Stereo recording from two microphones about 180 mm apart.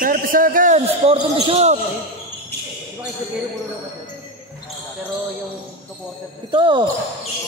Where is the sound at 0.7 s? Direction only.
35° right (ahead or behind).